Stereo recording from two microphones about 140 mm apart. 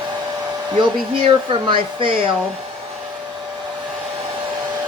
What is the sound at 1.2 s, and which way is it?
Speech, 40° right (ahead or behind).